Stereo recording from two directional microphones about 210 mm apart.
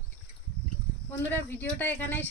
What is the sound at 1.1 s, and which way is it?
Speech, 10° left (ahead or behind).